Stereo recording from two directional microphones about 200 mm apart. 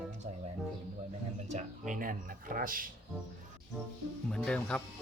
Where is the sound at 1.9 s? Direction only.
45° right (ahead or behind).